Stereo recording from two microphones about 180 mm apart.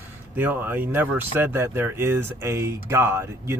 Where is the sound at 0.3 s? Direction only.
10° right (ahead or behind).